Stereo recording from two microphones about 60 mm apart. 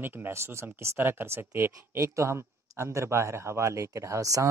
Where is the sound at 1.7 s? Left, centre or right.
Right.